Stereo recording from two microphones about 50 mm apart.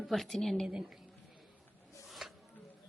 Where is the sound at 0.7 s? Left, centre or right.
Centre.